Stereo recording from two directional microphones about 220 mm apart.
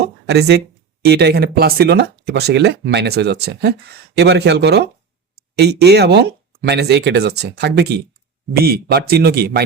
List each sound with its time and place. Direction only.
0.3 s speech: 50° right (ahead or behind)